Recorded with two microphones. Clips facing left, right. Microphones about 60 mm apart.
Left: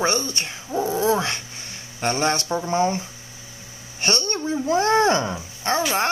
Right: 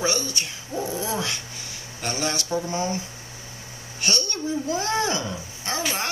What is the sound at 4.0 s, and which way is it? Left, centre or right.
Speech, left.